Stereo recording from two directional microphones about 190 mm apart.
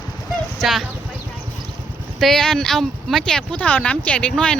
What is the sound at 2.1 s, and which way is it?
Speech, centre (ahead or behind).